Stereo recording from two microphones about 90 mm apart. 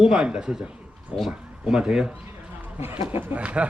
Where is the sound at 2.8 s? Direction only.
25° right (ahead or behind).